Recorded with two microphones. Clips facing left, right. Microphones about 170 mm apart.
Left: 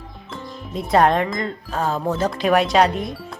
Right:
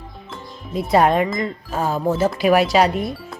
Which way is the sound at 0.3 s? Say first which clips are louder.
Left 2 dB; centre (ahead or behind).